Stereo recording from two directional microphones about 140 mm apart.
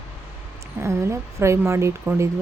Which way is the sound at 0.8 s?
20° right (ahead or behind).